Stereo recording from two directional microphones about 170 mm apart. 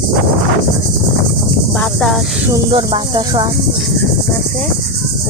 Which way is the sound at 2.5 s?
25° right (ahead or behind).